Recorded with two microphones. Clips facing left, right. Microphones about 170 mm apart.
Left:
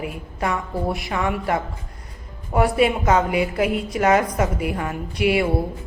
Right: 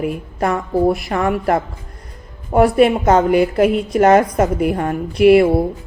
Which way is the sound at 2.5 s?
35° right (ahead or behind).